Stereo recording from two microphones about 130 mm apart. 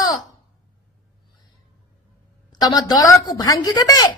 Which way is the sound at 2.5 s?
30° left (ahead or behind).